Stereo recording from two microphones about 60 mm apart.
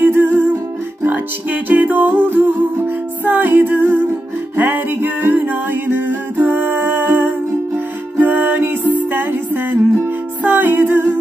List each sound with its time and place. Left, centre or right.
0.0 s music: right